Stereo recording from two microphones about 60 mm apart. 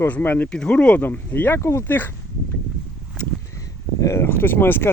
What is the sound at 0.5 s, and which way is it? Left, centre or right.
Speech, centre.